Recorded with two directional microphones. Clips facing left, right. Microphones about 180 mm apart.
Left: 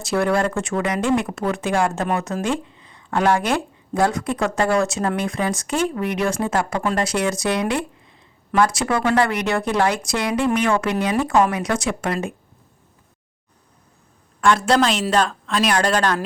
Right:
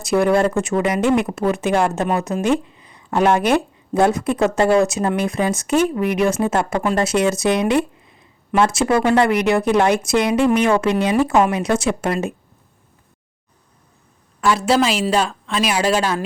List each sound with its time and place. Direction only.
0.1 s speech: 20° right (ahead or behind)
14.4 s a woman's voice: 5° right (ahead or behind)